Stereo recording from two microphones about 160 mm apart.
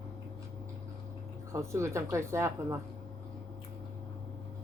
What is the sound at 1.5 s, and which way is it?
Speech, 20° right (ahead or behind).